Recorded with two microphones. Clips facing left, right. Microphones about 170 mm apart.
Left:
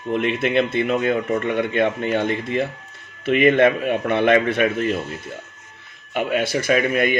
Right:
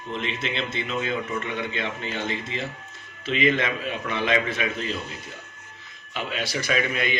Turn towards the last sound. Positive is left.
turn(degrees=50)  # may be behind; listen again after turning